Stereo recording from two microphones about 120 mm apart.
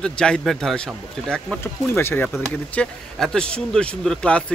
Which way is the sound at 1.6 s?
20° left (ahead or behind).